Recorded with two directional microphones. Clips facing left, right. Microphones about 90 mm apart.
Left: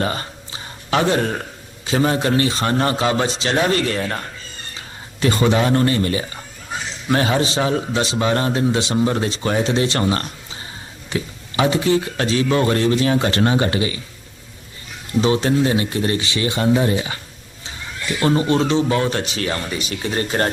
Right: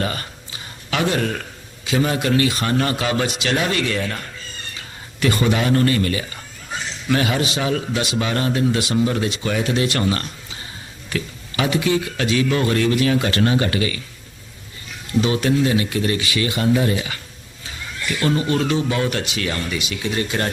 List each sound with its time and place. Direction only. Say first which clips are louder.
0.0 s a sound: left 2 dB; 30° left (ahead or behind)
1.8 s speech: left 2 dB; 35° left (ahead or behind)
5.2 s speech: left 2 dB; 25° left (ahead or behind)
15.2 s speech: left 2 dB; 30° left (ahead or behind)
18.2 s speech: left 3 dB; 30° left (ahead or behind)